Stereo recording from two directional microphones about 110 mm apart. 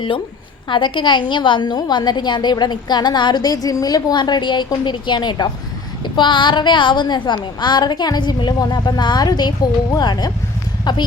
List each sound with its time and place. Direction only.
0.7 s a woman's voice: 45° left (ahead or behind)